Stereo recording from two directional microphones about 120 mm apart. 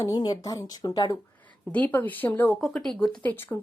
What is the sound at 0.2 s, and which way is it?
Speech, 30° left (ahead or behind).